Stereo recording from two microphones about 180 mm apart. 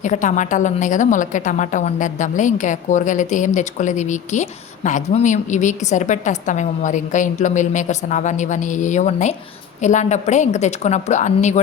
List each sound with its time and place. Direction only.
0.0 s a woman's voice: 45° left (ahead or behind)